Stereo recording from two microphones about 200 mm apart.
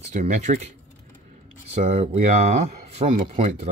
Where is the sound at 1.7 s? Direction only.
35° right (ahead or behind).